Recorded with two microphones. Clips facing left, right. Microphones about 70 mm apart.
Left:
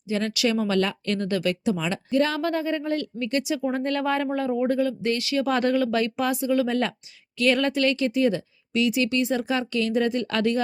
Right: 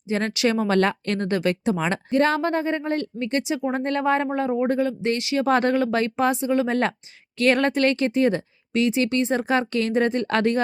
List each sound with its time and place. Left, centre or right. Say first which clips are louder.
0.1 s speech: right 2 dB; right